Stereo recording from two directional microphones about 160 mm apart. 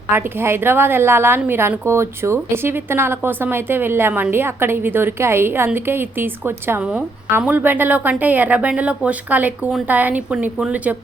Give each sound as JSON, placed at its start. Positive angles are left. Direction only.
{"t": 0.1, "sound": "a woman's voice", "side_deg": -15}